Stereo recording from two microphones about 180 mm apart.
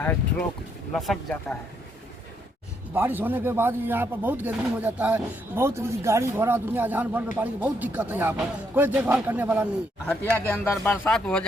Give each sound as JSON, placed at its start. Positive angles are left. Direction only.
{"t": 0.0, "sound": "speech", "side_deg": 10}
{"t": 0.9, "sound": "speech", "side_deg": 0}
{"t": 2.9, "sound": "speech", "side_deg": -10}
{"t": 10.1, "sound": "speech", "side_deg": 10}